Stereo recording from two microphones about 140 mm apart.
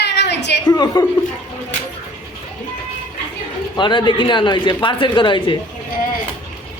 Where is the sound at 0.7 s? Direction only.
30° left (ahead or behind).